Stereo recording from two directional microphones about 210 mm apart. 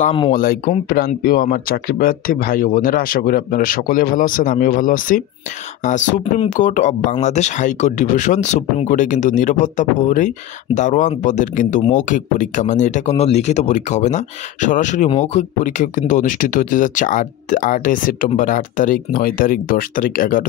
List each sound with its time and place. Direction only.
0.0 s speech: 25° left (ahead or behind)
0.3 s speech: 40° left (ahead or behind)